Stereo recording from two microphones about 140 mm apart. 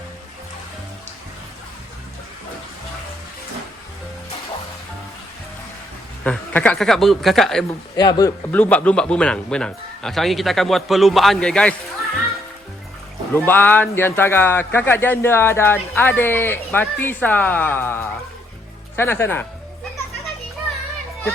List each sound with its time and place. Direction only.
6.2 s a man's voice: 10° left (ahead or behind)
7.9 s speech: 30° left (ahead or behind)
8.5 s a man's voice: 10° left (ahead or behind)
13.3 s speech: 15° left (ahead or behind)